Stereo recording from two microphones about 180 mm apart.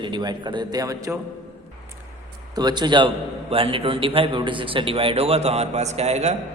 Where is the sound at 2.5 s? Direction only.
25° right (ahead or behind).